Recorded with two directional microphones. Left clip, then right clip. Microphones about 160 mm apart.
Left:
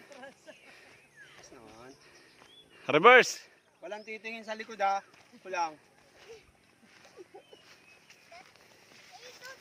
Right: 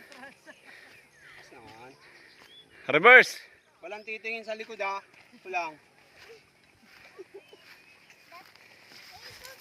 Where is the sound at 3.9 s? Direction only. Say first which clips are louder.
Right 4 dB; 40° left (ahead or behind).